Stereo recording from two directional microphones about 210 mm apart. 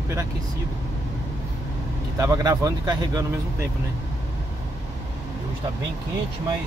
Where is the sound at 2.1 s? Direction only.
15° right (ahead or behind).